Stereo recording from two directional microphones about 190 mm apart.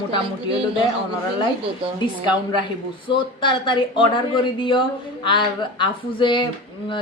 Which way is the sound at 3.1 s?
25° left (ahead or behind).